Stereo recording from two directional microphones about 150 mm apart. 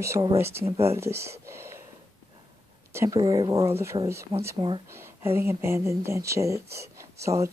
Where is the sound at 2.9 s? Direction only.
15° right (ahead or behind).